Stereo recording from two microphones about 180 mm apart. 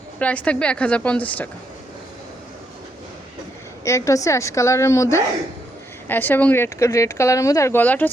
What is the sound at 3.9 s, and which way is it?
Speech, 15° left (ahead or behind).